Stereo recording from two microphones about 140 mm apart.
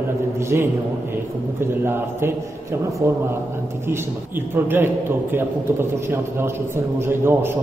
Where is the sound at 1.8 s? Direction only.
15° right (ahead or behind).